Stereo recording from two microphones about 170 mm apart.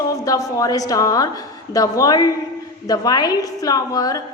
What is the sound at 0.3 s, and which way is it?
Female singing, 20° left (ahead or behind).